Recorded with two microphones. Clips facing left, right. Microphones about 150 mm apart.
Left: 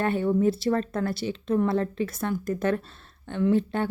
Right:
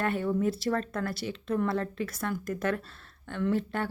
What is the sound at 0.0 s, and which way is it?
Speech, 25° left (ahead or behind).